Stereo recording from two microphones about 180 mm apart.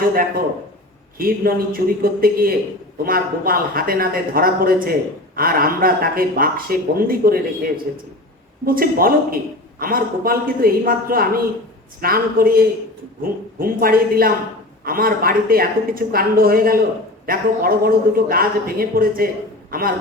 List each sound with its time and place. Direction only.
0.0 s a woman's voice: 55° right (ahead or behind)